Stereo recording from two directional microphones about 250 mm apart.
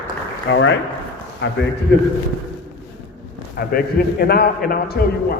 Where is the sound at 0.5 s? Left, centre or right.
Left.